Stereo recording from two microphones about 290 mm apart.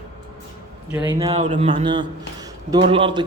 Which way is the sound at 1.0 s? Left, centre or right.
Centre.